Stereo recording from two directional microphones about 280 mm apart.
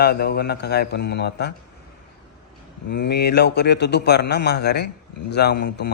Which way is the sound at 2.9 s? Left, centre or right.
Left.